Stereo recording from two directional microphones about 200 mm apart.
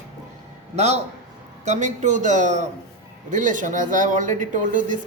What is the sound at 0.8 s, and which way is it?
A woman's voice, 35° right (ahead or behind).